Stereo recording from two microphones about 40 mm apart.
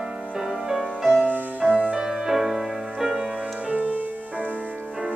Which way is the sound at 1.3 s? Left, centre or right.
Right.